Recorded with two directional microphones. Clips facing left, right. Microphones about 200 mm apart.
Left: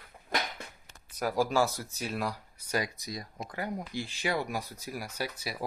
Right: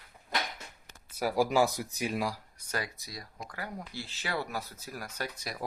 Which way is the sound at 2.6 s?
10° left (ahead or behind).